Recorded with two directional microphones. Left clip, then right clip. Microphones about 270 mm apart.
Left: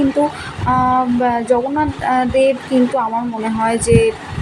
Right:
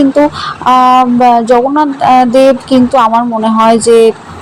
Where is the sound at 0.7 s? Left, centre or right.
Centre.